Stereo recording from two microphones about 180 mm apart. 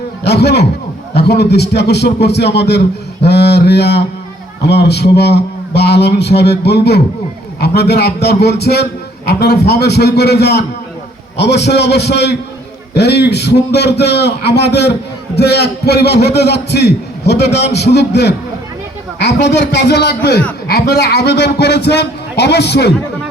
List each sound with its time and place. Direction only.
0.3 s a man's voice: 70° left (ahead or behind)